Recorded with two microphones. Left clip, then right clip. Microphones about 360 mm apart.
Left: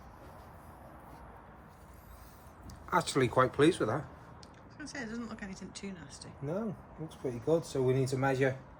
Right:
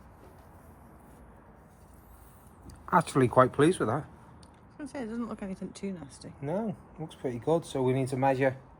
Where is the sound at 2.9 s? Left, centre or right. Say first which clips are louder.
Right 5 dB; centre.